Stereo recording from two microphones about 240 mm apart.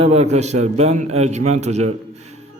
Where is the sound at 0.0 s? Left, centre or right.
Right.